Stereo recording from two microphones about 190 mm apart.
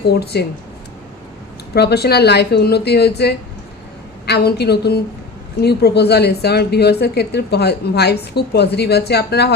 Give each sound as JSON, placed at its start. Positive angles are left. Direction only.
{"t": 0.1, "sound": "a woman's voice", "side_deg": 60}
{"t": 1.7, "sound": "a woman's voice", "side_deg": 60}